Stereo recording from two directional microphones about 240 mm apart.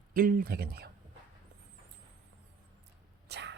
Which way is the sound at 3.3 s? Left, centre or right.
Right.